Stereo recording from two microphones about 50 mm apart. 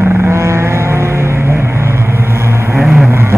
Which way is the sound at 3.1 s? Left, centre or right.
Right.